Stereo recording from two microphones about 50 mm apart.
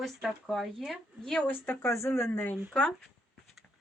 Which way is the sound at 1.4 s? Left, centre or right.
Left.